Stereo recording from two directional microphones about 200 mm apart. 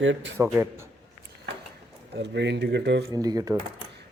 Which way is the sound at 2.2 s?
60° right (ahead or behind).